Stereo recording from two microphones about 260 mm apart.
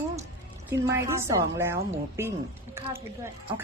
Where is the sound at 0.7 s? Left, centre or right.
Centre.